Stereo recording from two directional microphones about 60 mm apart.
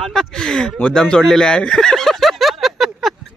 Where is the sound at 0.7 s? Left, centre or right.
Centre.